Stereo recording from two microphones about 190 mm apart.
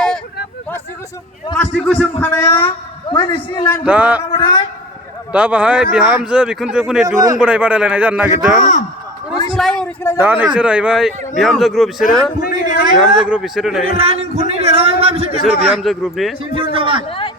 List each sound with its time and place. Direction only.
1.5 s speech: centre (ahead or behind)
2.4 s a woman's voice: 15° left (ahead or behind)
3.8 s a man's voice: 5° right (ahead or behind)
4.3 s a man's voice: 20° left (ahead or behind)
5.3 s a man's voice: 5° right (ahead or behind)
9.6 s a sound: 5° left (ahead or behind)
10.2 s speech: 10° right (ahead or behind)
12.4 s a man's voice: 50° left (ahead or behind)
12.8 s a man's voice: 25° right (ahead or behind)
13.1 s speech: 5° right (ahead or behind)
13.9 s a man's voice: 30° right (ahead or behind)
15.7 s speech: centre (ahead or behind)
16.7 s a man's voice: 25° right (ahead or behind)
17.1 s a sound: 30° left (ahead or behind)